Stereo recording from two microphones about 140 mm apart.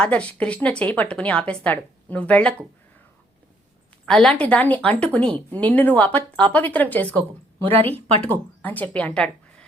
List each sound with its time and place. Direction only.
0.0 s a woman's voice: 10° left (ahead or behind)
4.0 s a woman's voice: 5° left (ahead or behind)
7.6 s speech: 40° right (ahead or behind)
8.2 s a woman's voice: 10° left (ahead or behind)